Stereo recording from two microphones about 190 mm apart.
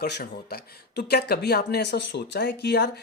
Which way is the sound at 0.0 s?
55° left (ahead or behind).